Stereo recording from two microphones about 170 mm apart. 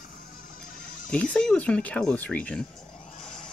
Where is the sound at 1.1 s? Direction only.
5° left (ahead or behind).